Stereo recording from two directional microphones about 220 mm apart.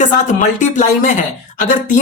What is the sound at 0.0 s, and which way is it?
Speech, 35° left (ahead or behind).